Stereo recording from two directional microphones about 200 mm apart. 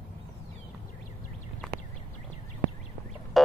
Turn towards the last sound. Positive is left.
turn(degrees=0)  # may be behind; listen again after turning